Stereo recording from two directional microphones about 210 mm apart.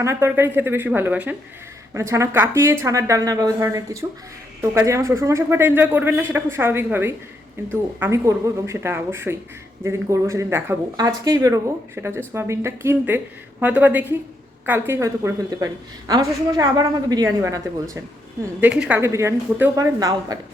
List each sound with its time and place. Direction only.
0.0 s speech: 10° right (ahead or behind)